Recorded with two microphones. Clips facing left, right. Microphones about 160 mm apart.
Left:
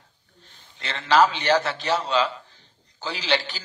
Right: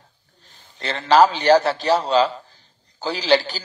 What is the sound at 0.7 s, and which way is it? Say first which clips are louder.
A man's voice: right 4 dB; 35° right (ahead or behind).